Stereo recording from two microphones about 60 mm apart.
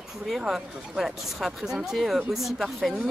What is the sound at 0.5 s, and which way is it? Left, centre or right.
Speech, centre.